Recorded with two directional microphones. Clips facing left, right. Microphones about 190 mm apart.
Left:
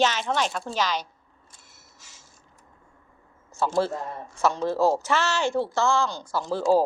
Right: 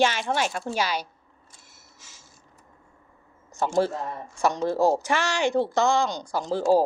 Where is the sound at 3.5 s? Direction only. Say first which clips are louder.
Right 1 dB; 15° right (ahead or behind).